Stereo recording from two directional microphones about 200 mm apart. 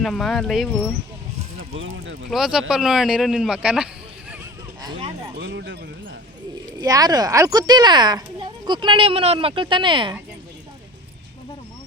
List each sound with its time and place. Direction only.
0.0 s speech: centre (ahead or behind)
1.7 s speech: 70° right (ahead or behind)
2.3 s speech: centre (ahead or behind)
4.8 s clip-clop: 25° right (ahead or behind)
5.4 s speech: 60° right (ahead or behind)
6.7 s speech: 20° right (ahead or behind)